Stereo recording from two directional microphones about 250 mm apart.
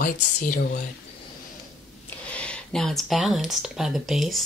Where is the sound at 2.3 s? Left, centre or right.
Centre.